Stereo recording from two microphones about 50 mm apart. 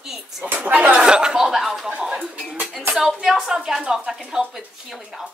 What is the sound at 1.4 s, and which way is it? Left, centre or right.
Speech, centre.